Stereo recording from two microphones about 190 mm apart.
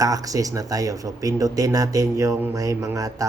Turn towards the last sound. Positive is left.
turn(degrees=-15)  # may be behind; listen again after turning